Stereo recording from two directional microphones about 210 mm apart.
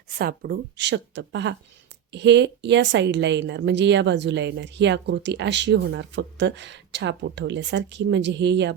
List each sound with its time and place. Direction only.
0.2 s a woman's voice: 50° right (ahead or behind)